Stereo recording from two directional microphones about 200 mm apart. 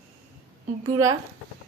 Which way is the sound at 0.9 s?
15° right (ahead or behind).